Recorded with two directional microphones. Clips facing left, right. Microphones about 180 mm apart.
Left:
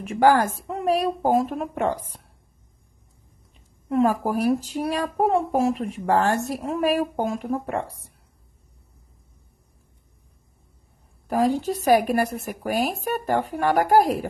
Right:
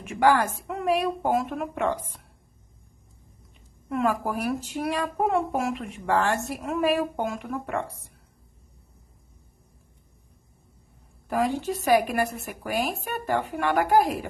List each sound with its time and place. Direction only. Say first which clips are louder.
0.2 s a woman's voice: left 3 dB; 40° left (ahead or behind)
3.9 s a woman's voice: left 5 dB; 35° left (ahead or behind)
11.2 s a woman's voice: left 4 dB; 40° left (ahead or behind)